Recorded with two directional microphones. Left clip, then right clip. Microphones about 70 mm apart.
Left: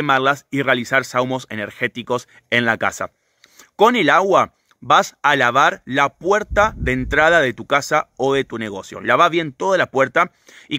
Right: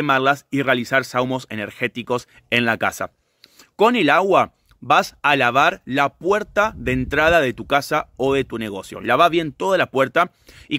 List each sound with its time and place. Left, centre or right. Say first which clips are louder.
0.0 s speech: left 1 dB; left
3.5 s speech: left 2 dB; left
10.5 s speech: even; left